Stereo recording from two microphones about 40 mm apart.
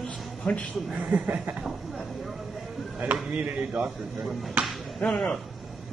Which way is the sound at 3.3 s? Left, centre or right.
Right.